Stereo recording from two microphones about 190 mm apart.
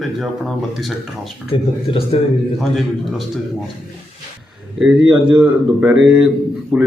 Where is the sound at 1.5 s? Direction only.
30° left (ahead or behind).